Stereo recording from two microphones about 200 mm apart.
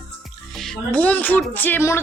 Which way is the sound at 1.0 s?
5° left (ahead or behind).